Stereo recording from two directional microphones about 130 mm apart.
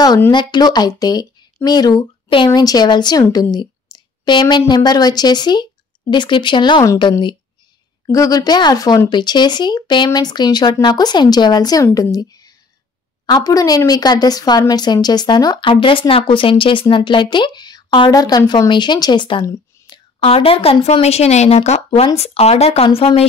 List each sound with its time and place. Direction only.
0.3 s speech: 35° left (ahead or behind)